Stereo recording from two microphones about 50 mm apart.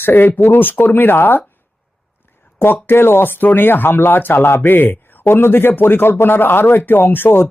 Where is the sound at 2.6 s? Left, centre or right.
Left.